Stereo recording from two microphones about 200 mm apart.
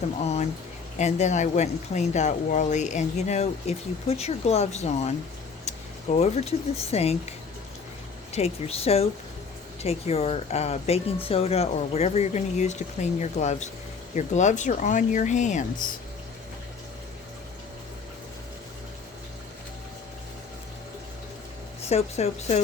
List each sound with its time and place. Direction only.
0.9 s speech: 35° left (ahead or behind)
21.8 s speech: 35° left (ahead or behind)